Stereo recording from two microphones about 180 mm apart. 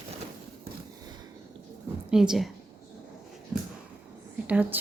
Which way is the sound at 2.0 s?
5° right (ahead or behind).